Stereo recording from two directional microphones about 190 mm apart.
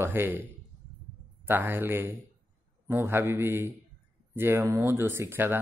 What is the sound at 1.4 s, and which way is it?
Speech, 10° right (ahead or behind).